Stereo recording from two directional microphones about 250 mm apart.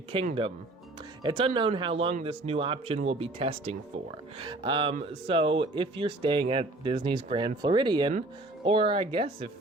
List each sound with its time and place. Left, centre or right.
0.1 s speech: right